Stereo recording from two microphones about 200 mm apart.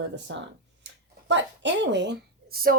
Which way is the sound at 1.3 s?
60° right (ahead or behind).